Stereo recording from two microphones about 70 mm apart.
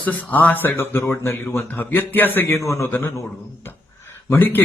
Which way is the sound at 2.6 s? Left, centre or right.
Left.